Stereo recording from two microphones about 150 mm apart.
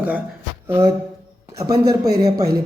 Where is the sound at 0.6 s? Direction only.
15° right (ahead or behind).